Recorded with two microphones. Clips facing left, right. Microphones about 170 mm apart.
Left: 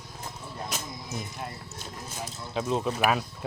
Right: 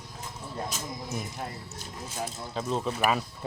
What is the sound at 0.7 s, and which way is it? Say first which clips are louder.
Music: left 1 dB; 65° left (ahead or behind).